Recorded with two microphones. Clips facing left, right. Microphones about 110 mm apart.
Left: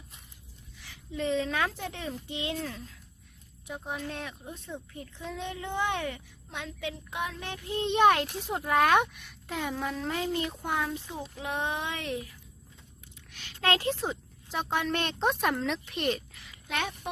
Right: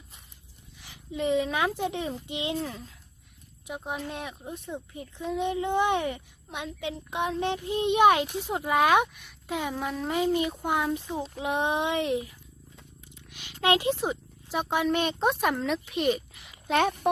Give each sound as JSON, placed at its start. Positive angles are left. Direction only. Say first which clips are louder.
{"t": 0.8, "sound": "speech", "louder": "right 3 dB", "side_deg": -20}
{"t": 13.3, "sound": "speech", "louder": "right 4 dB", "side_deg": -15}
{"t": 16.6, "sound": "speech", "louder": "right 9 dB", "side_deg": -35}